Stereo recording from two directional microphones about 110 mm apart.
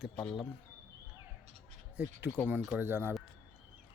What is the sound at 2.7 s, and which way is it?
Speech, 20° right (ahead or behind).